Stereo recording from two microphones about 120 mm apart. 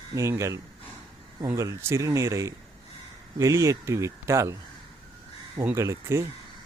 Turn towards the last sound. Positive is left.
turn(degrees=-25)  # may be behind; listen again after turning